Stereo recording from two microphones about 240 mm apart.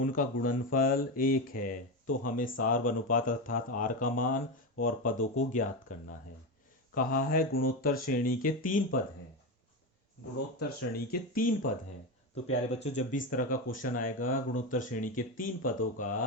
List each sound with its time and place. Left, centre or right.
0.0 s speech: left
10.6 s speech: left
12.8 s speech: left